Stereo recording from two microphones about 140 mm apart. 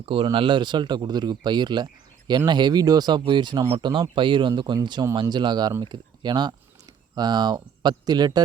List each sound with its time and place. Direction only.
0.0 s speech: 40° right (ahead or behind)